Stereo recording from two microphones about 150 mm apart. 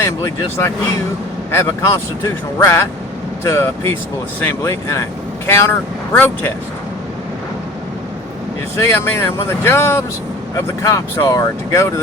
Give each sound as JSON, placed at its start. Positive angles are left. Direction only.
{"t": 0.0, "sound": "speech", "side_deg": 20}
{"t": 8.7, "sound": "speech", "side_deg": 15}